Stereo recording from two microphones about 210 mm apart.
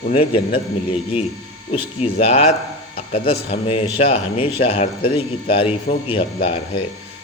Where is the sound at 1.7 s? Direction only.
30° left (ahead or behind).